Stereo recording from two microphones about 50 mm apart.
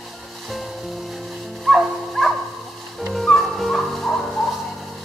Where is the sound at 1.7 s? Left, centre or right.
Centre.